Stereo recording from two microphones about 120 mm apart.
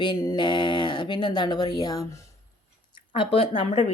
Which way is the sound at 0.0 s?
35° left (ahead or behind).